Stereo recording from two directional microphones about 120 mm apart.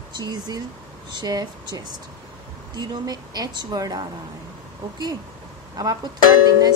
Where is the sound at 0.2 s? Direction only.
35° right (ahead or behind).